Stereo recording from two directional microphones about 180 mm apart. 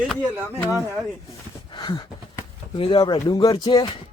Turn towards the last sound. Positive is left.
turn(degrees=25)  # may be behind; listen again after turning